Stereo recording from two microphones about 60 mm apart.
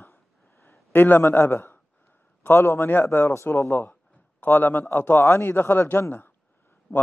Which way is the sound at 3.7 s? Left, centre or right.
Left.